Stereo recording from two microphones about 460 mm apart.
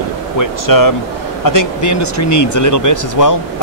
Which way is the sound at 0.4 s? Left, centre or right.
Left.